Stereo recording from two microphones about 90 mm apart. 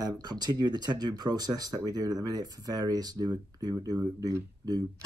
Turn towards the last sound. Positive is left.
turn(degrees=-45)  # may be behind; listen again after turning